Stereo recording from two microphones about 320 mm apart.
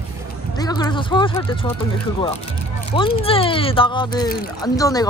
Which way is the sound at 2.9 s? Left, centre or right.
Centre.